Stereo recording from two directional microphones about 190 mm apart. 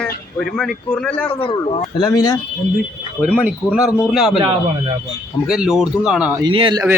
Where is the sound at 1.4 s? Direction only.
30° left (ahead or behind).